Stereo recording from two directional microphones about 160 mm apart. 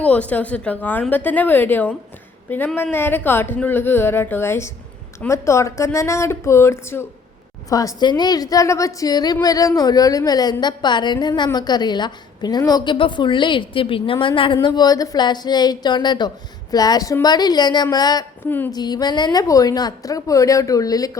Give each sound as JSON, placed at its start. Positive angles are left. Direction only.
{"t": 0.0, "sound": "a woman's voice", "side_deg": 10}
{"t": 18.4, "sound": "speech", "side_deg": 10}
{"t": 18.7, "sound": "a woman's voice", "side_deg": 25}